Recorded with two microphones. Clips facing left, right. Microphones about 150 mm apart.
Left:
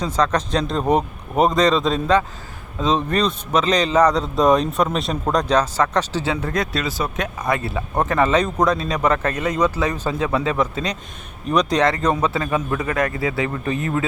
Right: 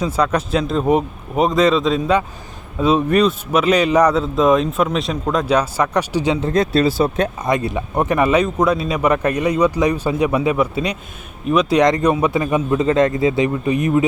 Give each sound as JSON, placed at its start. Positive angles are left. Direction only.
{"t": 0.0, "sound": "a man's voice", "side_deg": -10}
{"t": 11.8, "sound": "a man's voice", "side_deg": -15}